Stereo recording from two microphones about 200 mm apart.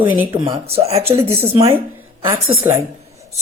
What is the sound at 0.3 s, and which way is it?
Speech, 25° right (ahead or behind).